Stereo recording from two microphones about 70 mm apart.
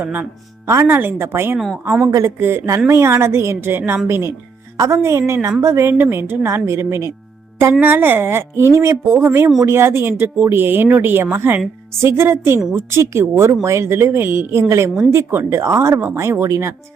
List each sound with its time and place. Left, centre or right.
0.0 s speech: right
0.7 s a woman's voice: right